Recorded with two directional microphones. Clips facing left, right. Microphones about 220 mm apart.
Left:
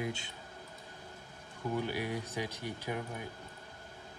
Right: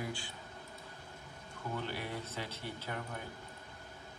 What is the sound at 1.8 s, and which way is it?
A man's voice, 10° left (ahead or behind).